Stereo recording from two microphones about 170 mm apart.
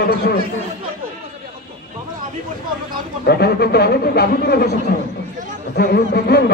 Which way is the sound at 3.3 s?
75° left (ahead or behind).